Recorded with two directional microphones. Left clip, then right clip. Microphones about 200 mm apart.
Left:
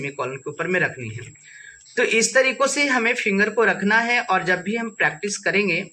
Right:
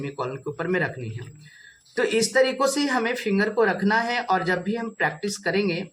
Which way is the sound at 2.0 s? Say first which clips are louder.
Left 2 dB; 20° right (ahead or behind).